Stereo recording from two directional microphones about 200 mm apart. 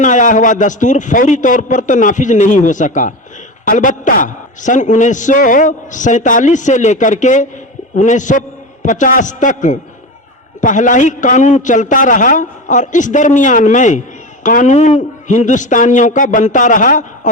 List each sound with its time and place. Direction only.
0.0 s a man's voice: 40° left (ahead or behind)